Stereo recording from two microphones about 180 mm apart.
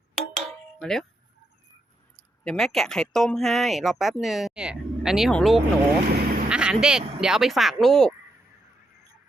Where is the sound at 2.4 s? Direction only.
5° left (ahead or behind).